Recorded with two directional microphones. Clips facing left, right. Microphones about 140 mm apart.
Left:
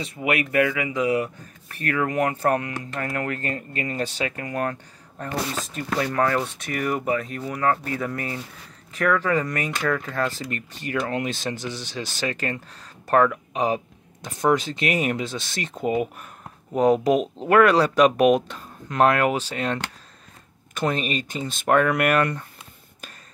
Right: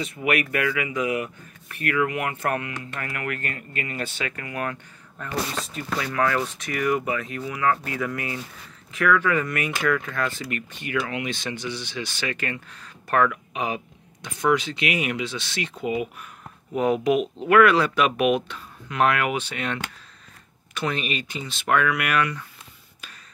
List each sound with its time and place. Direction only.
0.0 s speech: 30° left (ahead or behind)